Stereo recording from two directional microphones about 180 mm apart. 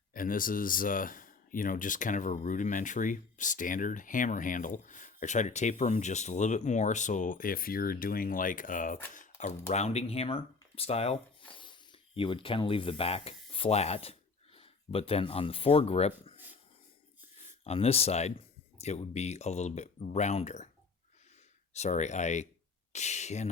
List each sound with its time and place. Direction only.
0.1 s speech: 50° left (ahead or behind); by 16.4 s 35° left (ahead or behind)
17.6 s speech: 35° left (ahead or behind)
21.7 s speech: 40° left (ahead or behind)